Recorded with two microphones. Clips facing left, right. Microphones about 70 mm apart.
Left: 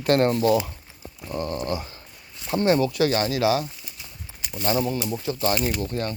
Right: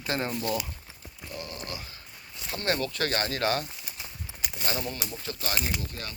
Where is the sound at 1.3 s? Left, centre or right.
Left.